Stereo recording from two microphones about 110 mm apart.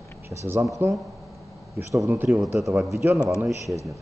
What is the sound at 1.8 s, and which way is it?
Speech, 30° right (ahead or behind).